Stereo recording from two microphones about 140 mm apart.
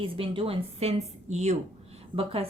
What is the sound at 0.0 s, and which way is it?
A woman's voice, 40° right (ahead or behind).